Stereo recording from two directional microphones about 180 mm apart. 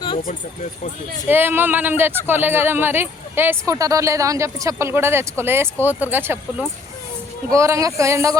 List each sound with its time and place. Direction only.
0.2 s speech: 50° left (ahead or behind)
1.3 s speech: 10° right (ahead or behind)
7.5 s speech: 15° right (ahead or behind)